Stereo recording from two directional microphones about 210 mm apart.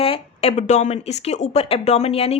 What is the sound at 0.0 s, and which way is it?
Speech, 30° left (ahead or behind).